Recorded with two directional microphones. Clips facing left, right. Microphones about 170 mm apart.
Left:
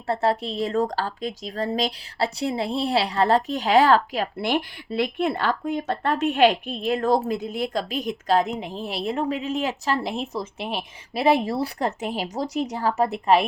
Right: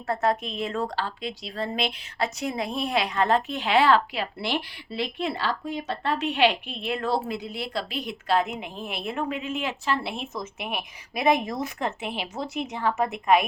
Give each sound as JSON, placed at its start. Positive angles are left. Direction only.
{"t": 0.1, "sound": "a woman's voice", "side_deg": 30}